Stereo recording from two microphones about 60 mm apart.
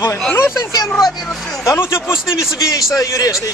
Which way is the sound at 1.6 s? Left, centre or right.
Left.